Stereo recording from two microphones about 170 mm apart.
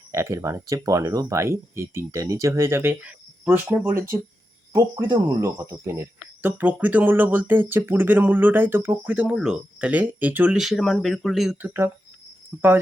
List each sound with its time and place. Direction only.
0.1 s speech: 15° right (ahead or behind)